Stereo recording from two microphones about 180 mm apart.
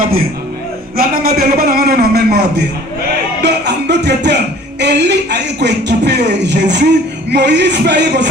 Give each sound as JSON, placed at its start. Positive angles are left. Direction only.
{"t": 0.9, "sound": "a man's voice", "side_deg": -55}